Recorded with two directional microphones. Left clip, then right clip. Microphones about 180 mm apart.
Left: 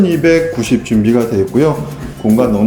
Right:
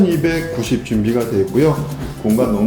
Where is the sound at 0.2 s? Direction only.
25° left (ahead or behind).